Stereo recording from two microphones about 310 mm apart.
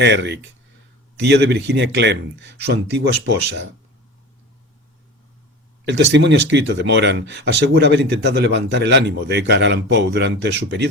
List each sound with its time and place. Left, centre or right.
0.0 s speech: right
5.9 s speech: right